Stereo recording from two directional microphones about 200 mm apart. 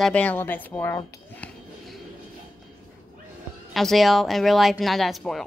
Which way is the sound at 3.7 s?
Centre (ahead or behind).